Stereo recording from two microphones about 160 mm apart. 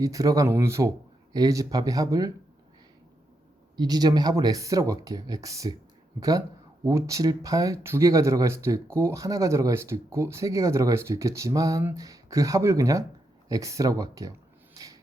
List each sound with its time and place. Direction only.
0.0 s speech: 20° right (ahead or behind)
3.8 s speech: 25° right (ahead or behind)